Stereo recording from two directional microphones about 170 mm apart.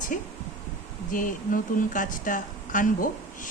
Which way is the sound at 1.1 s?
50° left (ahead or behind).